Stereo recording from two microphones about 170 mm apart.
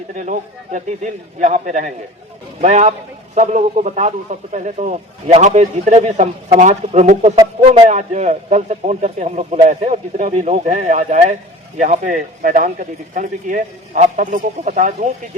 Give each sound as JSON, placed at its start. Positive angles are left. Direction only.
{"t": 0.2, "sound": "a man's voice", "side_deg": -45}